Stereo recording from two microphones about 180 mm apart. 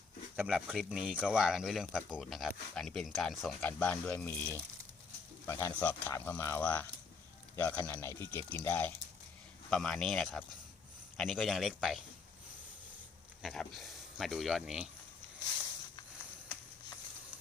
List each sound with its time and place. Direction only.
0.3 s speech: 5° right (ahead or behind)
13.4 s speech: centre (ahead or behind)